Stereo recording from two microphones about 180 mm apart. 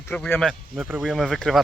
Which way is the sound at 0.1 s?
5° left (ahead or behind).